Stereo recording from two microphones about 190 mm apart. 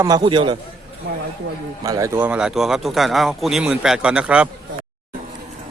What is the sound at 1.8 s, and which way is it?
A man's voice, 15° right (ahead or behind).